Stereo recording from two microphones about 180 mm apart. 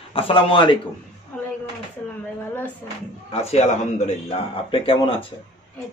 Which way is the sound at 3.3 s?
35° left (ahead or behind).